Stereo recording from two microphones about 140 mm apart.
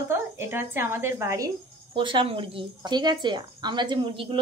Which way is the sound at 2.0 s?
35° right (ahead or behind).